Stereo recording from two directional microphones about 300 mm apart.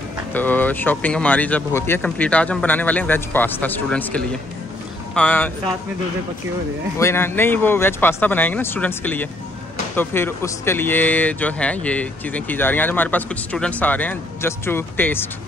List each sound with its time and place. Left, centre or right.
0.3 s speech: centre
7.0 s speech: centre